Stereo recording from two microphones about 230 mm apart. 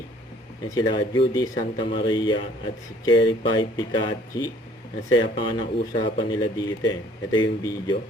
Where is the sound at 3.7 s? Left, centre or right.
Centre.